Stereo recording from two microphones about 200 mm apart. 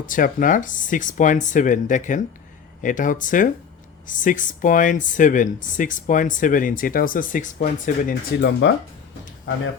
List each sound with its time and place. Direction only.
0.0 s speech: 40° left (ahead or behind)
8.4 s speech: 60° left (ahead or behind)